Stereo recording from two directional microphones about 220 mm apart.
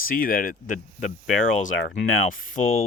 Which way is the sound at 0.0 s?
40° left (ahead or behind).